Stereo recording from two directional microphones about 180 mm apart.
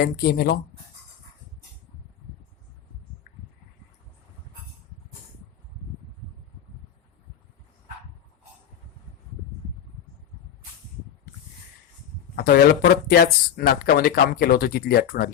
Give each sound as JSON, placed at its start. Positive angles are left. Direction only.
{"t": 0.0, "sound": "speech", "side_deg": 60}
{"t": 12.4, "sound": "speech", "side_deg": 60}